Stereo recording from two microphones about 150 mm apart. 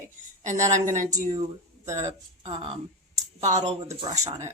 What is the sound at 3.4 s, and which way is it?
Speech, 50° right (ahead or behind).